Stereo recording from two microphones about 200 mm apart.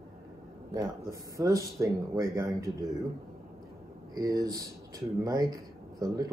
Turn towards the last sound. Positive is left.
turn(degrees=-15)  # may be behind; listen again after turning